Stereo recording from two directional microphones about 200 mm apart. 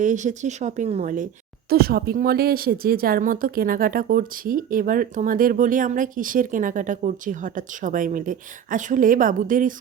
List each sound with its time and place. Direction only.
0.0 s speech: 40° right (ahead or behind)
1.7 s a woman's voice: 50° right (ahead or behind)